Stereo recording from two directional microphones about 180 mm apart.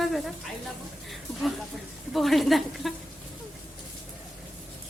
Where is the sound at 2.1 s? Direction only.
Centre (ahead or behind).